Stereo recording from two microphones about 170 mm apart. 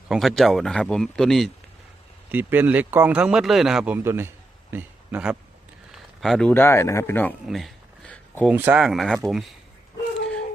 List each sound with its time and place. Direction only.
0.1 s speech: centre (ahead or behind)
2.3 s speech: 10° right (ahead or behind)
4.7 s a sound: 10° right (ahead or behind)
5.9 s speech: centre (ahead or behind)
7.4 s a sound: centre (ahead or behind)
8.4 s speech: 10° right (ahead or behind)